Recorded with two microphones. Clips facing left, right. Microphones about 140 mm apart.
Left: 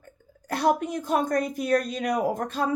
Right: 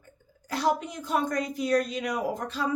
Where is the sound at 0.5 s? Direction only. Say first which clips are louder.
Left 3 dB; 55° left (ahead or behind).